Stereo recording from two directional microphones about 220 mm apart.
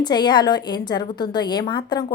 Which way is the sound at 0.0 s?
20° left (ahead or behind).